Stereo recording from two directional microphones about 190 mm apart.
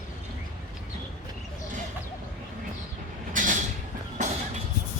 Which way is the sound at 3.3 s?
45° right (ahead or behind).